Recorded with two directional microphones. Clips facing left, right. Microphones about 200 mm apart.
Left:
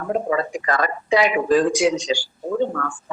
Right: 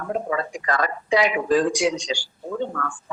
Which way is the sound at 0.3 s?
5° left (ahead or behind).